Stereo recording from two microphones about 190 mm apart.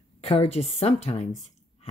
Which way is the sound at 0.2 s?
35° left (ahead or behind).